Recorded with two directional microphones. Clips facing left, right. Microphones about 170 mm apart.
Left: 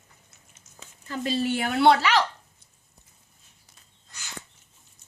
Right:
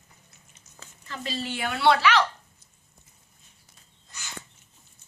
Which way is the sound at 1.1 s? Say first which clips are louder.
Left 7 dB; 45° left (ahead or behind).